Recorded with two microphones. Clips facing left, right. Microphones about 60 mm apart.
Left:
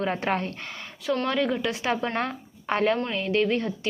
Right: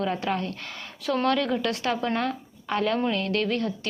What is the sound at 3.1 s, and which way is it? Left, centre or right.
Speech, centre.